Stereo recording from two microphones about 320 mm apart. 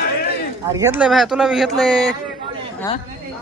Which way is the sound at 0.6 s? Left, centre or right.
Centre.